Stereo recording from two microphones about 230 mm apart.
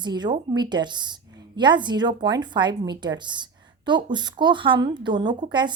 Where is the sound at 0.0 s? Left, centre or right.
Centre.